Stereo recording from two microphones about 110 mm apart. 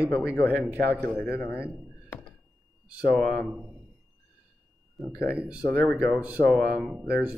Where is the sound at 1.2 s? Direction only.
20° left (ahead or behind).